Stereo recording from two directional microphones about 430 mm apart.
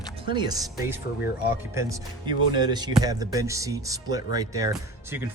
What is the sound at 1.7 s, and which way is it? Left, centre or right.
Speech, centre.